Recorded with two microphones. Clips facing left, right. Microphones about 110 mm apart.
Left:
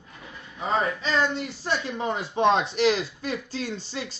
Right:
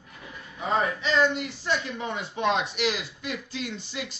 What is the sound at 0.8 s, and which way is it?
A man's voice, 35° left (ahead or behind).